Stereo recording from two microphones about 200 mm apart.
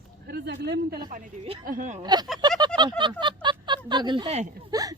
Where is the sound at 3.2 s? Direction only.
25° right (ahead or behind).